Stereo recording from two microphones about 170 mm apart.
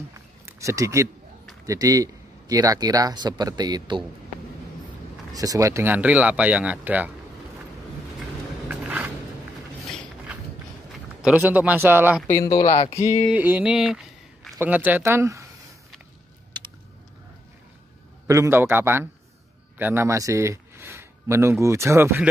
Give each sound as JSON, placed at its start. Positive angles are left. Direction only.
{"t": 0.1, "sound": "a sound", "side_deg": -20}
{"t": 1.7, "sound": "speech", "side_deg": -20}
{"t": 5.3, "sound": "speech", "side_deg": -20}
{"t": 8.6, "sound": "vehicle", "side_deg": -10}
{"t": 11.2, "sound": "speech", "side_deg": -10}
{"t": 12.3, "sound": "speech", "side_deg": 20}
{"t": 13.3, "sound": "speech", "side_deg": -10}
{"t": 18.2, "sound": "speech", "side_deg": -15}